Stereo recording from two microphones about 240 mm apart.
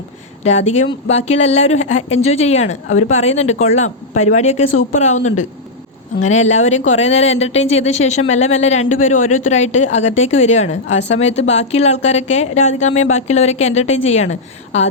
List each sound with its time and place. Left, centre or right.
0.4 s speech: left